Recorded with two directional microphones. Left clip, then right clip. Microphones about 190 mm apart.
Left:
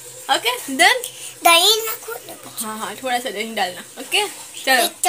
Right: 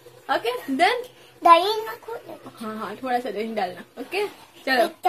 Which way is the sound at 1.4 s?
25° right (ahead or behind).